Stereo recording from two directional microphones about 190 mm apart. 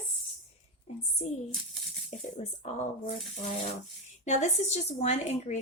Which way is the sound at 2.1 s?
40° left (ahead or behind).